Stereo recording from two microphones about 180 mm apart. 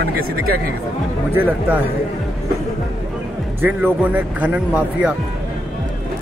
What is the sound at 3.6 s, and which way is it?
Speech, 10° right (ahead or behind).